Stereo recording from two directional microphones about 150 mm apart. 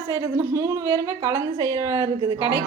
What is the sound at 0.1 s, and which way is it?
A woman's voice, 15° right (ahead or behind).